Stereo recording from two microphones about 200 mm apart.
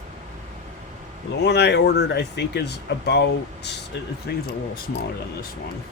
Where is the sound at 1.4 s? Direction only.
60° left (ahead or behind).